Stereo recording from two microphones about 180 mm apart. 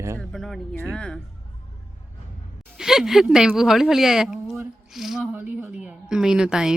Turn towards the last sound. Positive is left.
turn(degrees=-5)  # may be behind; listen again after turning